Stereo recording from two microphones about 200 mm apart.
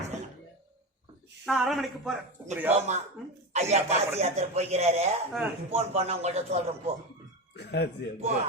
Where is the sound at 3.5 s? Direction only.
35° right (ahead or behind).